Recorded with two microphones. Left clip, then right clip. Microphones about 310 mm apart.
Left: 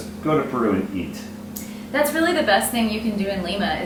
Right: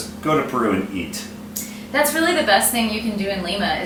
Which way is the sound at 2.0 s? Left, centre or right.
Centre.